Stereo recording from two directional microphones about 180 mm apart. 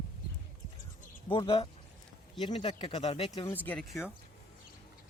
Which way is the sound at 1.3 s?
30° left (ahead or behind).